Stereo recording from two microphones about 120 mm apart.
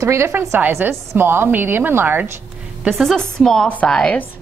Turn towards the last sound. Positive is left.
turn(degrees=5)  # may be behind; listen again after turning